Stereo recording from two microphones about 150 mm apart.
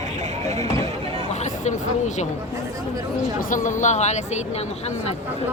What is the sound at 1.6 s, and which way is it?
Speech, 50° left (ahead or behind).